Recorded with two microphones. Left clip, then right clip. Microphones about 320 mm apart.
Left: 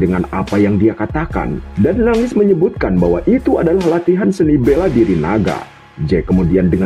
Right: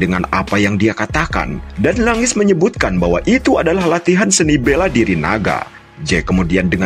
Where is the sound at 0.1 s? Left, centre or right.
Right.